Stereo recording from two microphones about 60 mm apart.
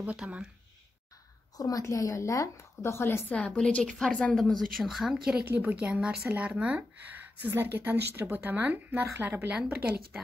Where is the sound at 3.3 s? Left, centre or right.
Left.